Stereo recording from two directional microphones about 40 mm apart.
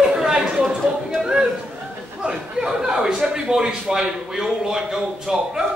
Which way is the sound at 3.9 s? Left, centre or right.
Centre.